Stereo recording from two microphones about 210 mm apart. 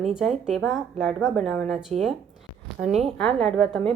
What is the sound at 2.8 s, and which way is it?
Speech, 30° right (ahead or behind).